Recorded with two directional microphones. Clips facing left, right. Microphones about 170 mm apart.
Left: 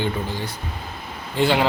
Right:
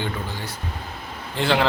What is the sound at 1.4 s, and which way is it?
Speech, 10° left (ahead or behind).